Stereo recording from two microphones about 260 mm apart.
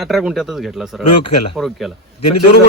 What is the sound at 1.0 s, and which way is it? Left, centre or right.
Speech, left.